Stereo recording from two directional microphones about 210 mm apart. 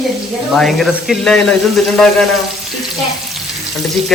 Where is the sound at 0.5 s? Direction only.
Centre (ahead or behind).